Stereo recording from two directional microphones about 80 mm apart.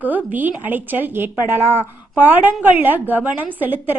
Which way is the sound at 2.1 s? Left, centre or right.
Right.